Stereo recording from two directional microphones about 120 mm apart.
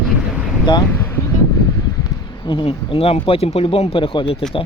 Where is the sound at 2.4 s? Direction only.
40° left (ahead or behind).